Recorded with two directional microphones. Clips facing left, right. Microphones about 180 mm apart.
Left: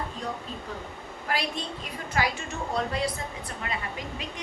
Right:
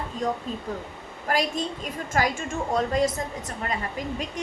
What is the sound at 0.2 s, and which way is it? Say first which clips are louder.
A woman's voice: right 7 dB; 45° right (ahead or behind).